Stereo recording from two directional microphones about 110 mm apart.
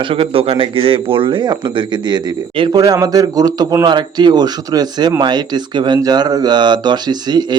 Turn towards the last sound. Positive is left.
turn(degrees=-40)  # may be behind; listen again after turning